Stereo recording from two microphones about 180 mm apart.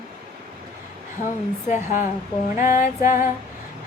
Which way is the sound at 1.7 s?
45° left (ahead or behind).